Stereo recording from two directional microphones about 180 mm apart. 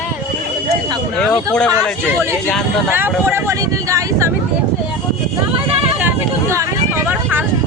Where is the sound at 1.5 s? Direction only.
5° left (ahead or behind).